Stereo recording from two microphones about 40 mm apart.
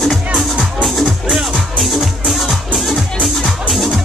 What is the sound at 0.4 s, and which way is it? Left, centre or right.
Music, centre.